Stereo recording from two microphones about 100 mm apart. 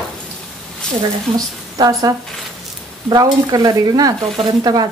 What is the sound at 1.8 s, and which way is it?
Stir, 40° right (ahead or behind).